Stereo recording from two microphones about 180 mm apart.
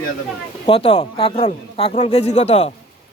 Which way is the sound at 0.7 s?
35° left (ahead or behind).